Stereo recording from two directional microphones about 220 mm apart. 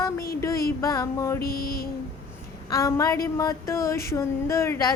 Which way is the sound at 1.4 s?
45° left (ahead or behind).